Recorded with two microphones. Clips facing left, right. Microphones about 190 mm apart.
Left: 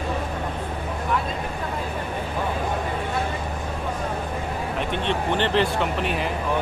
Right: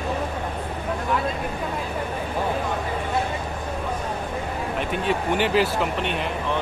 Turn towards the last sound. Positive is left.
turn(degrees=0)  # may be behind; listen again after turning